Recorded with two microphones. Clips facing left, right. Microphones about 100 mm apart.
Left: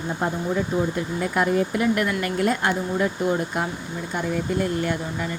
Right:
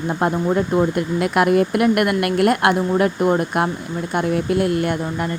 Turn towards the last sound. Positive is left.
turn(degrees=-55)  # may be behind; listen again after turning